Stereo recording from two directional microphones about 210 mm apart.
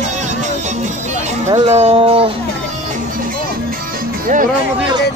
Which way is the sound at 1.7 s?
30° right (ahead or behind).